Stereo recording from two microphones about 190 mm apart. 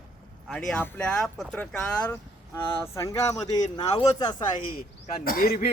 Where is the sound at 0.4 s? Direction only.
Centre (ahead or behind); by 4.4 s 20° left (ahead or behind).